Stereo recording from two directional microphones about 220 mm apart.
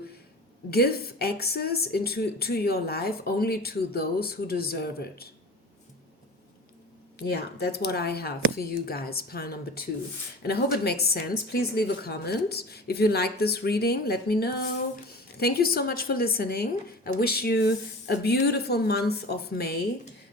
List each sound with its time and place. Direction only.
0.7 s speech: 45° left (ahead or behind)
7.2 s speech: 50° left (ahead or behind)